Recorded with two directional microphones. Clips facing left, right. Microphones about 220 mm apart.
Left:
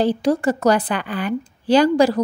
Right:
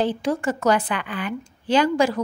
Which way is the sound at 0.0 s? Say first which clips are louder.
Left 5 dB; 35° left (ahead or behind).